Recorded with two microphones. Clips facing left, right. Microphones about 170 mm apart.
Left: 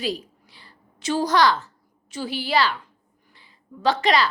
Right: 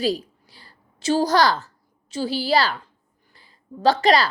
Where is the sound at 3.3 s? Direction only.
40° right (ahead or behind).